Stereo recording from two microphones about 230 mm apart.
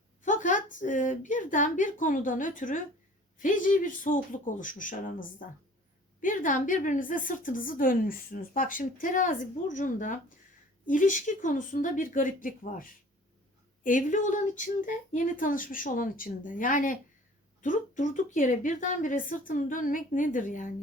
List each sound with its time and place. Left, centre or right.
0.2 s a woman's voice: left